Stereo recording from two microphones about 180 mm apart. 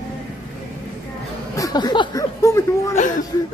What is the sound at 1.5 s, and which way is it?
Speech, 20° left (ahead or behind).